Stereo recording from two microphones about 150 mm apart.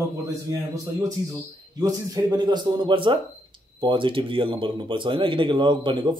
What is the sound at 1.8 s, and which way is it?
A man's voice, 25° right (ahead or behind).